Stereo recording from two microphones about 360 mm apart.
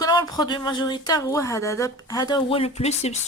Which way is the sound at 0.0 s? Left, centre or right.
Centre.